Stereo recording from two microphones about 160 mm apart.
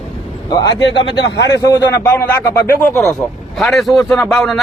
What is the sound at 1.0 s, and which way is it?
Speech, 90° left.